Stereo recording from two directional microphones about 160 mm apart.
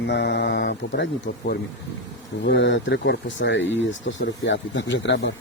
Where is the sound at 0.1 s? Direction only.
90° left.